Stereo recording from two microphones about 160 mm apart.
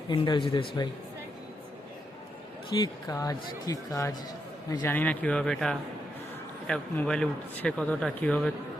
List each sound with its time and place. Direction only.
0.1 s speech: 30° left (ahead or behind)
2.7 s a man's voice: 25° left (ahead or behind); by 5.7 s 5° left (ahead or behind)
6.9 s speech: 5° left (ahead or behind)